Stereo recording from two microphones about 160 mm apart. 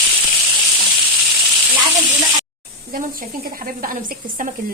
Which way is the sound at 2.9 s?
65° right (ahead or behind).